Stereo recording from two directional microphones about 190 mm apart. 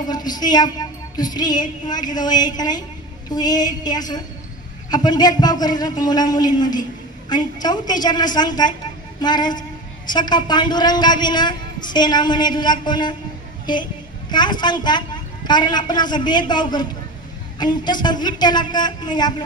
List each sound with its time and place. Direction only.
0.1 s music: 20° left (ahead or behind)
1.9 s a man's voice: 20° left (ahead or behind)
14.3 s a man's voice: 25° left (ahead or behind)